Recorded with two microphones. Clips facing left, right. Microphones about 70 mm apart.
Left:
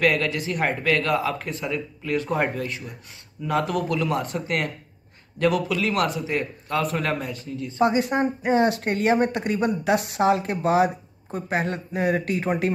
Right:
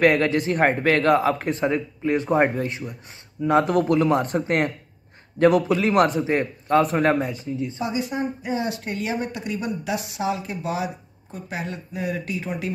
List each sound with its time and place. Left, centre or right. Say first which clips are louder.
0.0 s a man's voice: right 4 dB; right
7.8 s speech: left 8 dB; left